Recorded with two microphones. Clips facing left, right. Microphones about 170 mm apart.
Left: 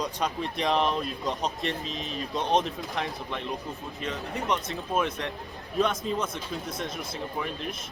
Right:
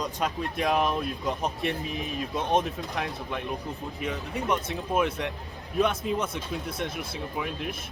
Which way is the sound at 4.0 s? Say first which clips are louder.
Right 1 dB; 10° right (ahead or behind).